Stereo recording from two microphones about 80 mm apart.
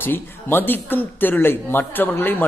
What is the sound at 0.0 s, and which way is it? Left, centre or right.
Speech, left.